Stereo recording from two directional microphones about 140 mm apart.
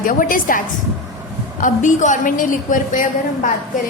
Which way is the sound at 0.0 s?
75° left (ahead or behind).